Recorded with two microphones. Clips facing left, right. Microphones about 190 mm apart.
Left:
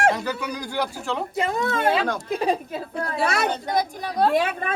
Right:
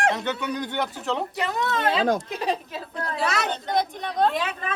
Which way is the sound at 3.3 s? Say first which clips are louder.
Left 3 dB; 55° left (ahead or behind).